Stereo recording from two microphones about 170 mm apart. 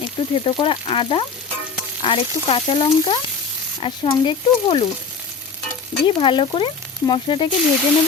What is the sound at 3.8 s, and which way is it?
Frying, 30° left (ahead or behind).